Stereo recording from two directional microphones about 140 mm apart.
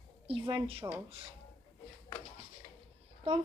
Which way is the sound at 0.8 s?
25° right (ahead or behind).